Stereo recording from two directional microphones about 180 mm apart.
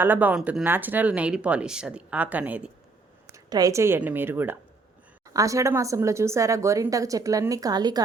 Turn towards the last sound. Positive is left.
turn(degrees=-20)  # may be behind; listen again after turning